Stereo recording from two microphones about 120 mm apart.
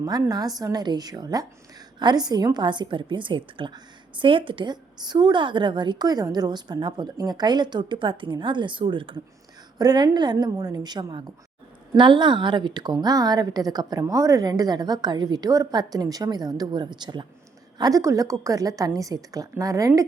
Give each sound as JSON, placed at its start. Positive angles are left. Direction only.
{"t": 0.0, "sound": "a woman's voice", "side_deg": -35}